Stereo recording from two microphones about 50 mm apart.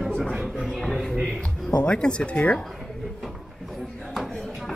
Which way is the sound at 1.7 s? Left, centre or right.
Centre.